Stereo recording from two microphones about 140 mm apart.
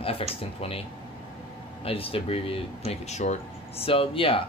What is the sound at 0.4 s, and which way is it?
Speech, 40° left (ahead or behind).